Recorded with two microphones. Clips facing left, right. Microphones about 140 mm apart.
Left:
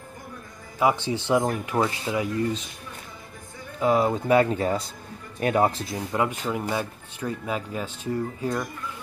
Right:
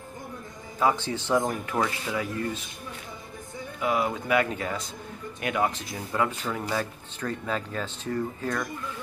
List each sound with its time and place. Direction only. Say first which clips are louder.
0.7 s speech: left 2 dB; 15° left (ahead or behind)
3.8 s speech: left 5 dB; 30° left (ahead or behind)